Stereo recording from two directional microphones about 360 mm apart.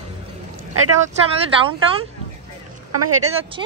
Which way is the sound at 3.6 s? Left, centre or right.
Centre.